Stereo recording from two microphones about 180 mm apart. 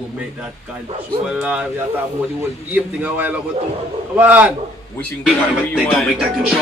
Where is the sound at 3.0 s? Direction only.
10° right (ahead or behind).